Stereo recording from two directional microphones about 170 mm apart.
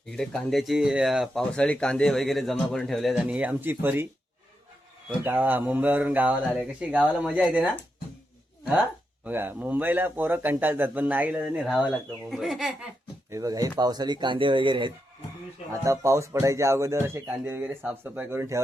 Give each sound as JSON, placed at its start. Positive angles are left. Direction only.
{"t": 0.0, "sound": "speech", "side_deg": 5}
{"t": 5.2, "sound": "speech", "side_deg": -10}
{"t": 9.2, "sound": "speech", "side_deg": -10}
{"t": 13.3, "sound": "speech", "side_deg": -20}
{"t": 15.8, "sound": "speech", "side_deg": -15}